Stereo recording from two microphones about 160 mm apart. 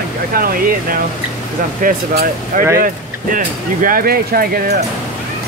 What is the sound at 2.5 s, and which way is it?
Speech, 60° right (ahead or behind).